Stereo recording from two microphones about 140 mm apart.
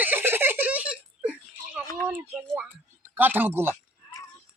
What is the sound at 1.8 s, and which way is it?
Speech, 20° left (ahead or behind).